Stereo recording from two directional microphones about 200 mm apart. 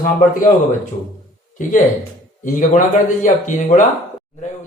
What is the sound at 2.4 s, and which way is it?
Speech, 40° left (ahead or behind).